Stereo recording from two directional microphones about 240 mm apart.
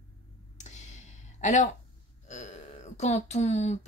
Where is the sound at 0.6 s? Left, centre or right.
Left.